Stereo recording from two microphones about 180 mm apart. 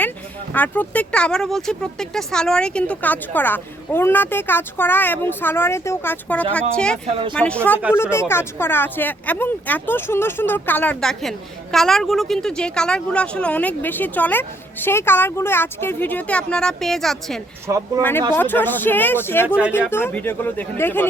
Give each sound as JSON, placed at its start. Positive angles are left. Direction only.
{"t": 0.5, "sound": "speech", "side_deg": 10}
{"t": 7.0, "sound": "speech", "side_deg": -30}
{"t": 7.3, "sound": "speech", "side_deg": 5}
{"t": 17.7, "sound": "speech", "side_deg": -20}
{"t": 18.3, "sound": "speech", "side_deg": 10}